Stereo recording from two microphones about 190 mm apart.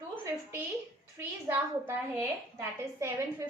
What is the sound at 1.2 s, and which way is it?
A woman's voice, 10° right (ahead or behind).